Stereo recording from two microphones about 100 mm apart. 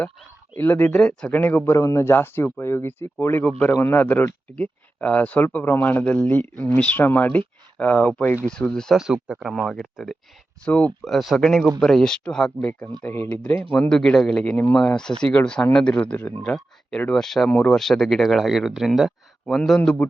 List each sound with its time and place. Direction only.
0.5 s speech: 20° left (ahead or behind)
1.8 s speech: 30° left (ahead or behind); by 9.0 s 5° left (ahead or behind)
9.0 s speech: 5° right (ahead or behind)
10.7 s speech: 15° left (ahead or behind)
11.0 s speech: centre (ahead or behind)